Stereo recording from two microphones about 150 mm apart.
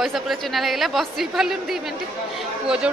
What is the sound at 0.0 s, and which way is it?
A woman's voice, centre (ahead or behind).